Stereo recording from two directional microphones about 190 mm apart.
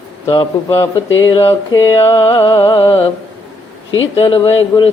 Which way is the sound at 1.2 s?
25° left (ahead or behind).